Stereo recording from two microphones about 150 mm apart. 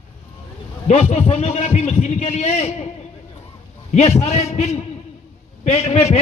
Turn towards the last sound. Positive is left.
turn(degrees=45)  # may be behind; listen again after turning